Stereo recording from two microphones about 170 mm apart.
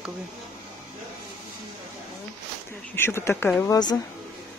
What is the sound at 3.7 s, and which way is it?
Speech, 25° left (ahead or behind).